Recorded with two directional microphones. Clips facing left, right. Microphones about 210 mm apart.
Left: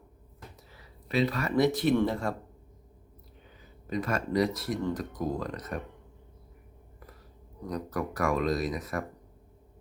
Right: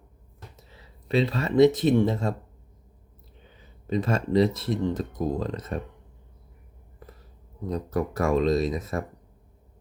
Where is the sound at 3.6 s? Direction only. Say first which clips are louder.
Right 5 dB; 25° right (ahead or behind).